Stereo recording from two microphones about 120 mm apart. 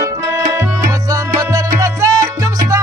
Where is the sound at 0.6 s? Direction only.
30° right (ahead or behind).